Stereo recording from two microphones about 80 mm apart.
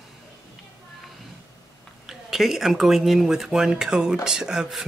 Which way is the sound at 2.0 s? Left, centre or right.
Centre.